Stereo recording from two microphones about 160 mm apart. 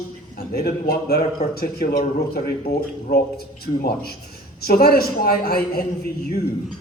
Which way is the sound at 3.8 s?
75° left (ahead or behind).